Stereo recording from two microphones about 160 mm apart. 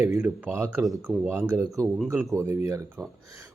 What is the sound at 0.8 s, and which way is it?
Speech, 5° right (ahead or behind).